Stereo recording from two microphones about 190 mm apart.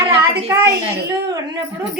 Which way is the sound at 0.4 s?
15° right (ahead or behind).